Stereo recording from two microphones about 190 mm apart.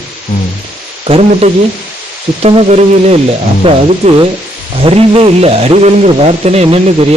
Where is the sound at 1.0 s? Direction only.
30° right (ahead or behind).